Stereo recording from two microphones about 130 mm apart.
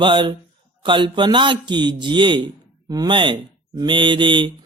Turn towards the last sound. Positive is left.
turn(degrees=-40)  # may be behind; listen again after turning